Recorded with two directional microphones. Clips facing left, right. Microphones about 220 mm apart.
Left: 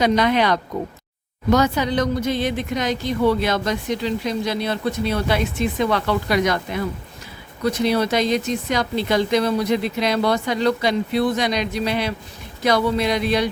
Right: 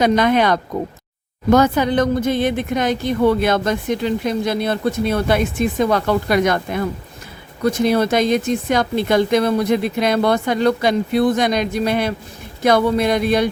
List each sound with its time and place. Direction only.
0.0 s speech: 50° right (ahead or behind)